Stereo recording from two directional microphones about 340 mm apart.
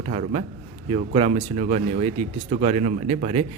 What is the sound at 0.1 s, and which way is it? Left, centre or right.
A man's voice, centre.